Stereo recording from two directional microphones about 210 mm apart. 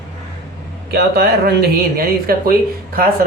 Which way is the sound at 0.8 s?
50° right (ahead or behind).